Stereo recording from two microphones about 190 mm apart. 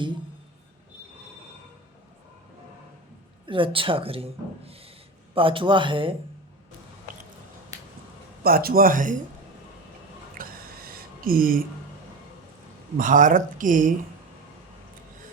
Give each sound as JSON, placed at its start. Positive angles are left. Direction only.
{"t": 3.4, "sound": "a woman's voice", "side_deg": -25}
{"t": 8.4, "sound": "speech", "side_deg": -50}
{"t": 10.3, "sound": "a sound", "side_deg": -50}
{"t": 13.0, "sound": "speech", "side_deg": -45}